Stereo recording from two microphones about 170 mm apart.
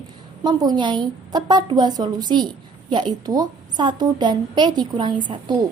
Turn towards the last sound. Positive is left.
turn(degrees=-25)  # may be behind; listen again after turning